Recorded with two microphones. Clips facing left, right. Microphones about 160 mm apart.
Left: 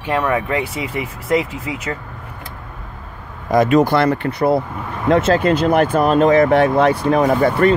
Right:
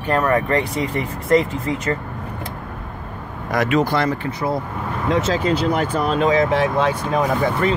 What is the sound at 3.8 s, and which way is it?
Speech, 60° left (ahead or behind).